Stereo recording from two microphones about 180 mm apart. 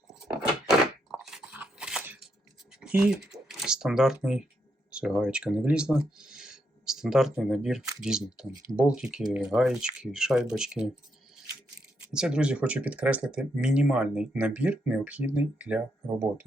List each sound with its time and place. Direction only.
0.1 s a sound: centre (ahead or behind)
2.8 s speech: 5° right (ahead or behind)
11.9 s speech: 5° right (ahead or behind)